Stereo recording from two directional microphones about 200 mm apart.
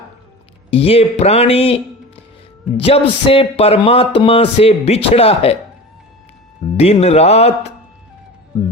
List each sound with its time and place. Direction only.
0.7 s speech: 30° left (ahead or behind)
6.7 s speech: 30° left (ahead or behind)